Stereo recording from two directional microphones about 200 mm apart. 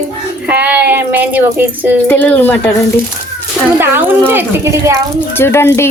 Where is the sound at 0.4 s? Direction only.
5° right (ahead or behind).